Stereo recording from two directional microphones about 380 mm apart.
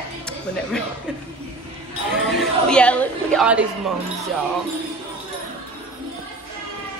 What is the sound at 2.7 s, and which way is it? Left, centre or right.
A woman's voice, centre.